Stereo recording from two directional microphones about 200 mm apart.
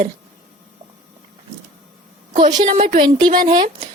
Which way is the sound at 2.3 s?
35° right (ahead or behind).